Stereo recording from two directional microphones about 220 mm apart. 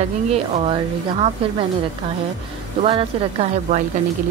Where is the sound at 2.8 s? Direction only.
25° right (ahead or behind).